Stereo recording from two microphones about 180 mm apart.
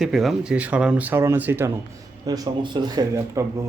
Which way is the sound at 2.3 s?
25° right (ahead or behind).